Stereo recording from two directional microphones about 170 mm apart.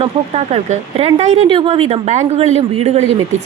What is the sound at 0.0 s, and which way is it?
A woman's voice, 40° right (ahead or behind).